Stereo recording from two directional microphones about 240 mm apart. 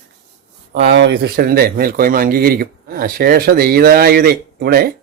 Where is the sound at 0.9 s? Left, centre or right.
Right.